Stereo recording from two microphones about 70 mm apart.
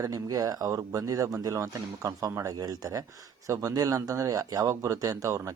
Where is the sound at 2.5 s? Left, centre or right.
Right.